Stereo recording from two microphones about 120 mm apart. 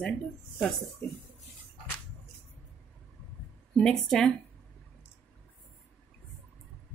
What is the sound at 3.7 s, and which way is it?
Speech, 5° left (ahead or behind).